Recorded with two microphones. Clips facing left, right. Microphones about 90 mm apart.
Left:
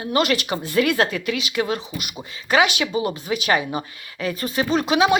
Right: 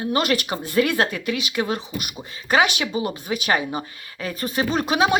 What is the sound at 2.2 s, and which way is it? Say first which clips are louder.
Speech: left 1 dB; 35° right (ahead or behind).